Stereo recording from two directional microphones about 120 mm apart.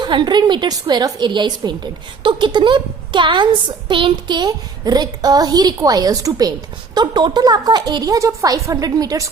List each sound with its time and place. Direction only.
0.0 s speech: 40° right (ahead or behind)